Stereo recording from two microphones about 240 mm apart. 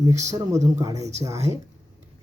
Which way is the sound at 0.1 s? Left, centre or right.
Right.